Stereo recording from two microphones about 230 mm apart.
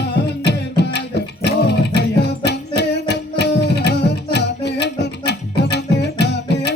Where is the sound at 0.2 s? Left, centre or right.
Left.